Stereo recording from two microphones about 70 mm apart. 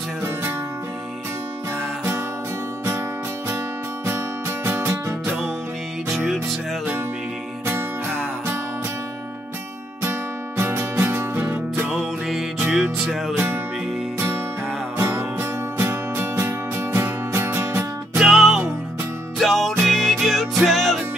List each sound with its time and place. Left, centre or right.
6.0 s music: centre
10.6 s music: right
12.0 s music: centre
15.0 s music: right
18.1 s music: centre